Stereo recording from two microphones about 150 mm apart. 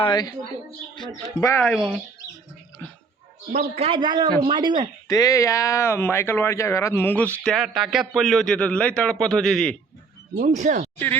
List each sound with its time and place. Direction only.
0.0 s speech: 30° left (ahead or behind)
1.6 s a man's voice: centre (ahead or behind)
3.5 s a man's voice: 45° right (ahead or behind); by 4.9 s 30° right (ahead or behind)
5.0 s speech: 25° left (ahead or behind)
7.4 s a man's voice: centre (ahead or behind)
10.3 s speech: 55° right (ahead or behind)